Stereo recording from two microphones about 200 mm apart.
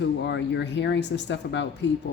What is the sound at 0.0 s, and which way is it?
Speech, 60° left (ahead or behind).